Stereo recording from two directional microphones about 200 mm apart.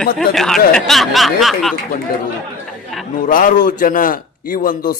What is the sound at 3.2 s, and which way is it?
Speech, 40° left (ahead or behind).